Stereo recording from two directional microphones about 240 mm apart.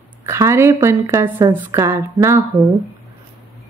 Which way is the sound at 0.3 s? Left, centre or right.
Centre.